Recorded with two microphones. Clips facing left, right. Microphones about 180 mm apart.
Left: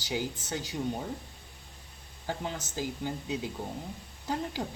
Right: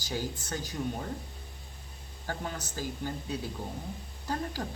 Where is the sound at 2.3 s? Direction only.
20° left (ahead or behind).